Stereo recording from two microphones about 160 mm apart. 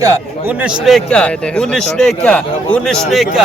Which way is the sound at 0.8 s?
Centre (ahead or behind).